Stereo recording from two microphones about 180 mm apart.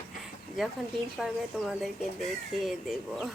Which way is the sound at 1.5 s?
5° left (ahead or behind).